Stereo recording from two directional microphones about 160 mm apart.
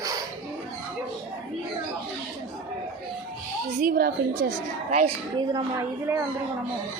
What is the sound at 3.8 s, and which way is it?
Speech, 65° right (ahead or behind).